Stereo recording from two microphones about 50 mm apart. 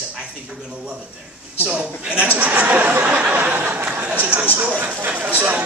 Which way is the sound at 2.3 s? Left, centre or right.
Right.